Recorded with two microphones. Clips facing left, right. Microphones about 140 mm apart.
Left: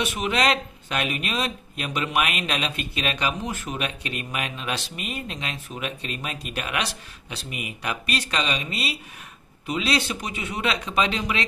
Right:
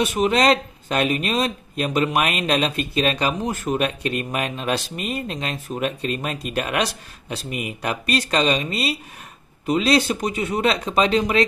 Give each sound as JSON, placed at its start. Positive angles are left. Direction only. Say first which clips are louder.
{"t": 0.0, "sound": "speech", "louder": "right 5 dB", "side_deg": -40}